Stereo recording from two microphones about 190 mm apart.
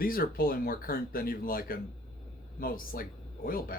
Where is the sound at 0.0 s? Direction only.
50° left (ahead or behind).